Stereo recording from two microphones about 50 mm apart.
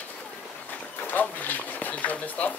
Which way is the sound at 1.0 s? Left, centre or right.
Left.